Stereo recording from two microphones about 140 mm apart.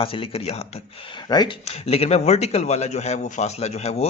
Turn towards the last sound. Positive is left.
turn(degrees=50)  # may be behind; listen again after turning